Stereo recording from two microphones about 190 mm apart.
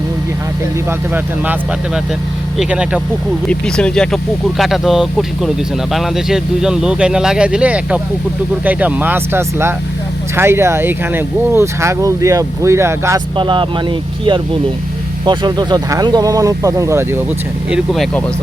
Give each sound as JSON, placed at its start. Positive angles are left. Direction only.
{"t": 0.9, "sound": "speech", "side_deg": -10}
{"t": 2.6, "sound": "speech", "side_deg": -5}
{"t": 13.3, "sound": "speech", "side_deg": -25}
{"t": 15.2, "sound": "speech", "side_deg": -25}
{"t": 17.7, "sound": "speech", "side_deg": 0}